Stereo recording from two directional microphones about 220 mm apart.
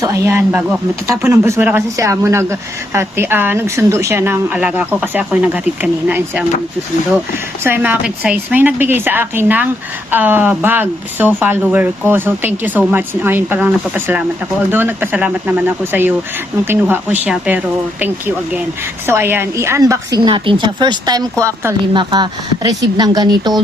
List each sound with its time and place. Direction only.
0.0 s speech: 15° right (ahead or behind)
7.6 s speech: 10° right (ahead or behind)
19.0 s speech: 10° right (ahead or behind)